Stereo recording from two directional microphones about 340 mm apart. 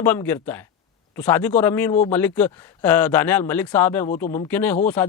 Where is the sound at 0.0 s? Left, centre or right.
Centre.